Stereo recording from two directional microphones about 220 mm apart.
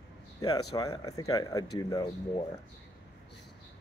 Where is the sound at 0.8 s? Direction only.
15° left (ahead or behind).